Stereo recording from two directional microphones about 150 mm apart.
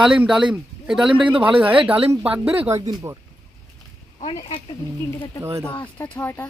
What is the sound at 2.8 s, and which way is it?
Speech, 25° right (ahead or behind).